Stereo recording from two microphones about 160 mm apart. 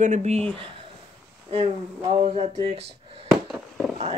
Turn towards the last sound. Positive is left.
turn(degrees=0)  # may be behind; listen again after turning